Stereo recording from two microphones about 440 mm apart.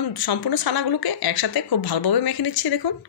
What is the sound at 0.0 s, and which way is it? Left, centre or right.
A woman's voice, left.